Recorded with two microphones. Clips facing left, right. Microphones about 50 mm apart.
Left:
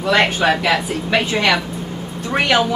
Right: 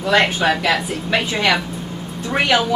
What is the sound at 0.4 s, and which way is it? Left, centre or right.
Speech, centre.